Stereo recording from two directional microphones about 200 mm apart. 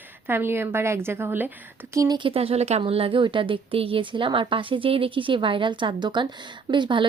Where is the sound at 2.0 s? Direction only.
20° right (ahead or behind).